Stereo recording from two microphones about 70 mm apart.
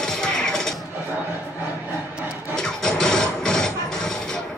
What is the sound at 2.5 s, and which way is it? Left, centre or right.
Music, centre.